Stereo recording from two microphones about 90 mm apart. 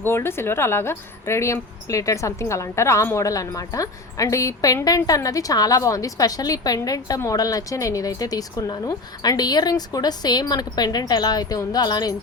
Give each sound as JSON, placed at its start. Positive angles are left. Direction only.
{"t": 0.0, "sound": "a woman's voice", "side_deg": 25}